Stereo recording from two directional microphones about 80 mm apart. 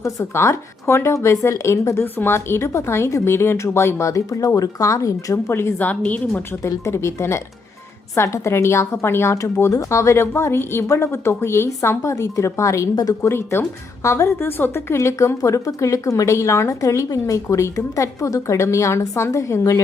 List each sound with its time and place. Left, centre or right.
0.2 s a woman's voice: left
5.8 s a woman's voice: centre
6.6 s a woman's voice: left
13.2 s a woman's voice: left